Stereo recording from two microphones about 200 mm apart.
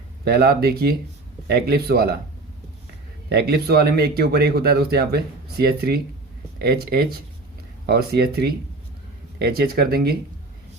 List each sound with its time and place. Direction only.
0.3 s speech: 50° right (ahead or behind)
3.2 s speech: 55° right (ahead or behind)